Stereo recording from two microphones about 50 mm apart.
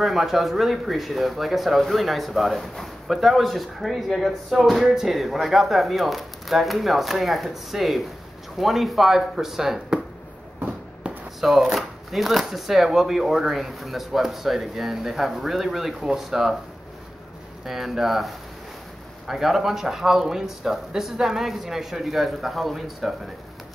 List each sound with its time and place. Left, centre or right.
0.0 s speech: centre
11.4 s speech: centre
17.6 s speech: centre